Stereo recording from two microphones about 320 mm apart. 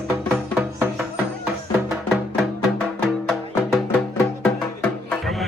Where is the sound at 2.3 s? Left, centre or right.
Centre.